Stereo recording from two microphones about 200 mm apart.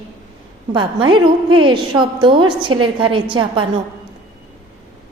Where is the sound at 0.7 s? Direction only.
25° right (ahead or behind).